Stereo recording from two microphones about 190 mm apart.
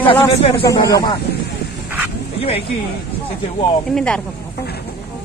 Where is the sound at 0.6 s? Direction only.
20° left (ahead or behind).